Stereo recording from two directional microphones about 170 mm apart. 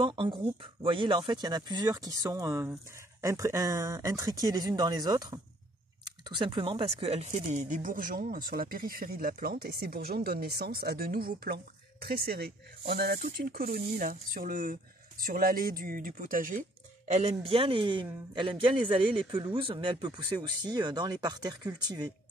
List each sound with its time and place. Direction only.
0.0 s speech: 30° right (ahead or behind); by 13.7 s 65° right (ahead or behind)
13.7 s speech: 45° right (ahead or behind)
17.1 s speech: 35° right (ahead or behind)